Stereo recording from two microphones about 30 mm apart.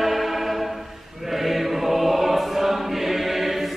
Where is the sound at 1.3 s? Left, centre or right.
Centre.